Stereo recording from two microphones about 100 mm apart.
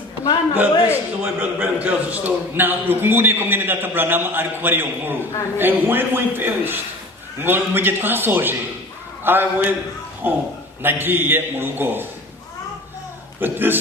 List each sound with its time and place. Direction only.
0.9 s a man's voice: 20° right (ahead or behind)
13.4 s a man's voice: 20° right (ahead or behind)